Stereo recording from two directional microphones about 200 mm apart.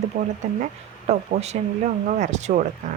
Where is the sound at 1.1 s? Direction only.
35° right (ahead or behind).